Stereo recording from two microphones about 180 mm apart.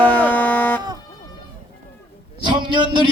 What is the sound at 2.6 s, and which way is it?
Speech, 25° right (ahead or behind).